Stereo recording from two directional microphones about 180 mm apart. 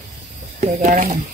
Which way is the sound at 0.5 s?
45° right (ahead or behind).